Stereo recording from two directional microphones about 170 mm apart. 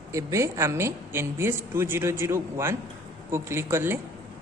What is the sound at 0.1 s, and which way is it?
Speech, 15° right (ahead or behind).